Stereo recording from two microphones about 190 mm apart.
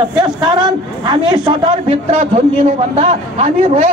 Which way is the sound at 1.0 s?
25° right (ahead or behind).